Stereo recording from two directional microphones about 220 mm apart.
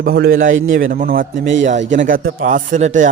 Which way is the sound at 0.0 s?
45° right (ahead or behind).